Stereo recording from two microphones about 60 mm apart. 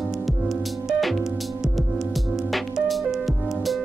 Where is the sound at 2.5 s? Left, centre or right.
Centre.